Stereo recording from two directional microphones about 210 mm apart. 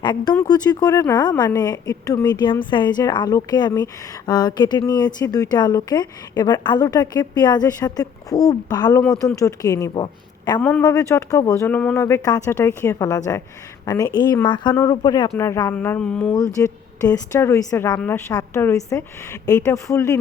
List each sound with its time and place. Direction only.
0.0 s a woman's voice: 20° left (ahead or behind)
10.6 s a woman's voice: 10° left (ahead or behind)
16.6 s a woman's voice: 15° left (ahead or behind)